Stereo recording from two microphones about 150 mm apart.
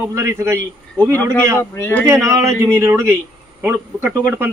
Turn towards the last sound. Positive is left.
turn(degrees=-10)  # may be behind; listen again after turning